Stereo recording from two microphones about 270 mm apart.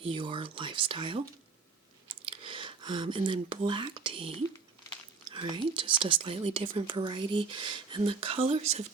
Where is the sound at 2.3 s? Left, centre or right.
Centre.